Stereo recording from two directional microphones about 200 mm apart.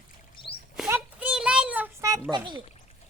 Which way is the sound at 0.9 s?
10° right (ahead or behind).